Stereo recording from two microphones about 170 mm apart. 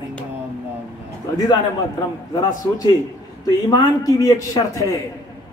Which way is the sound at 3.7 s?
20° left (ahead or behind).